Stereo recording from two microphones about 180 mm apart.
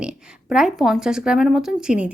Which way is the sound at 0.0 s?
5° right (ahead or behind).